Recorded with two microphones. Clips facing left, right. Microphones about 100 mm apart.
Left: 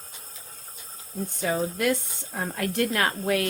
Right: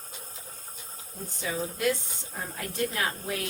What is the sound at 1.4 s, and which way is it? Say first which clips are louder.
A woman's voice: left 5 dB; 55° left (ahead or behind).